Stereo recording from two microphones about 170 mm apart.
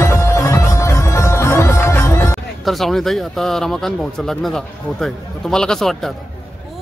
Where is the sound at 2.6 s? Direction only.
Centre (ahead or behind).